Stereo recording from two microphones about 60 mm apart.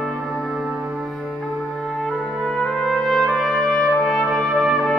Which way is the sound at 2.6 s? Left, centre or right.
Centre.